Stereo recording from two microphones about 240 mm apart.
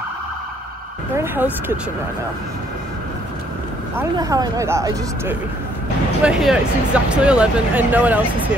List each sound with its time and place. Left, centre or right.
1.1 s speech: centre
4.0 s speech: centre